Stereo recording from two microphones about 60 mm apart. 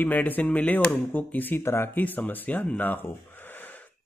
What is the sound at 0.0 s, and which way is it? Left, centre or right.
Speech, left.